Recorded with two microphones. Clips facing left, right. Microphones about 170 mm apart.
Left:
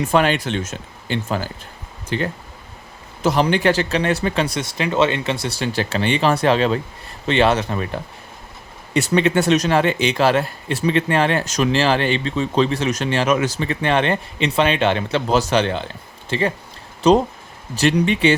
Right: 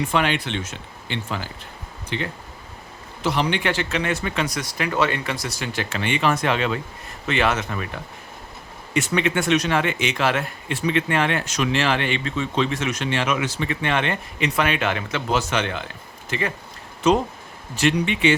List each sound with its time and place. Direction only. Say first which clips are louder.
0.1 s speech: left 5 dB; 40° left (ahead or behind)